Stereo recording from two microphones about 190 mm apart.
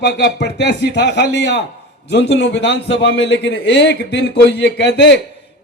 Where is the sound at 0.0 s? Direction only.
65° left (ahead or behind).